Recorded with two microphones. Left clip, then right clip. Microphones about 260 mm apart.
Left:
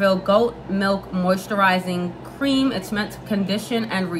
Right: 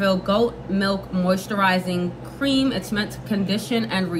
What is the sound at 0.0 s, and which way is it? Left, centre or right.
A woman's voice, centre.